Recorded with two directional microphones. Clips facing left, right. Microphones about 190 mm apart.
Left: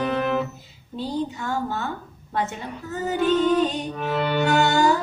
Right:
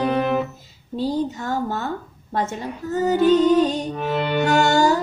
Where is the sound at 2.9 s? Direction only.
40° right (ahead or behind).